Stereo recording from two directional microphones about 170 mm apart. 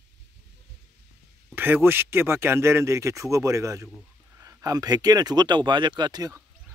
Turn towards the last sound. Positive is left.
turn(degrees=-20)  # may be behind; listen again after turning